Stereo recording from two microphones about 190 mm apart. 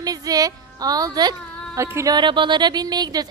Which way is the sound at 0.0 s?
20° right (ahead or behind).